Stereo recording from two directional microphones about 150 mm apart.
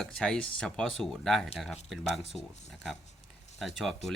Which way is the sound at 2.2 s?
45° left (ahead or behind).